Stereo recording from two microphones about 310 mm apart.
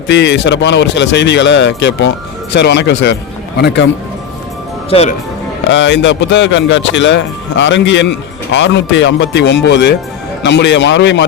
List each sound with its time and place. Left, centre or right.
0.1 s speech: left
4.9 s speech: centre
5.6 s speech: left